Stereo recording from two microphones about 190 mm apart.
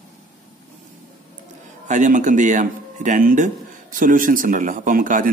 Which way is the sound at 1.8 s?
40° right (ahead or behind).